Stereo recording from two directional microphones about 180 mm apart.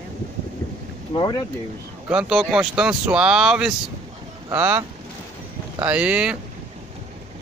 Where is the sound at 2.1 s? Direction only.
5° right (ahead or behind).